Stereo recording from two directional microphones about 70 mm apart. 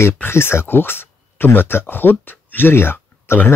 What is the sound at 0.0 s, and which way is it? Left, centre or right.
Speech, left.